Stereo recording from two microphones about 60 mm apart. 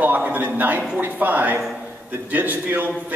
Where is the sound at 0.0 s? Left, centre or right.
Right.